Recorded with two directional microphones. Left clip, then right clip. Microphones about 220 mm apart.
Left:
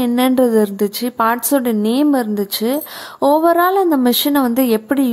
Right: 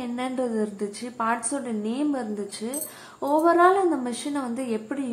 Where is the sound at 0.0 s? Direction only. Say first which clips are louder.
Left 14 dB; 50° left (ahead or behind).